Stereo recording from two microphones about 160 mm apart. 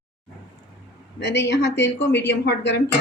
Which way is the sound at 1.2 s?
90° left.